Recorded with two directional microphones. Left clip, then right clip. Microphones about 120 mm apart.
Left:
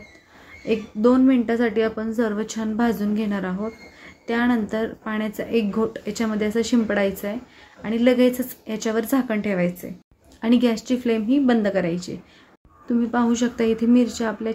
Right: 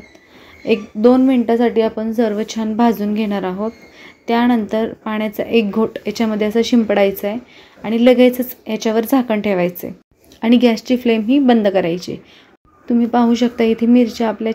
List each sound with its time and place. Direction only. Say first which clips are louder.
0.7 s a woman's voice: right 6 dB; 20° right (ahead or behind)
10.4 s a woman's voice: right 7 dB; 20° right (ahead or behind)